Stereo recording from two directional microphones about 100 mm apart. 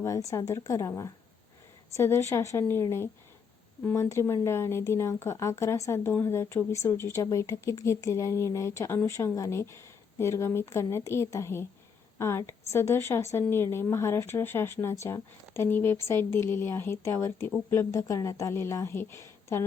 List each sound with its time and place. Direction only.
0.0 s speech: 35° left (ahead or behind)